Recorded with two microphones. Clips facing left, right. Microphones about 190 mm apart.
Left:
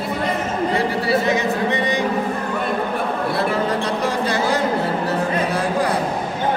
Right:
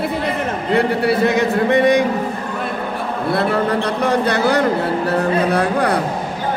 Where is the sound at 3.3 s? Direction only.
60° right (ahead or behind).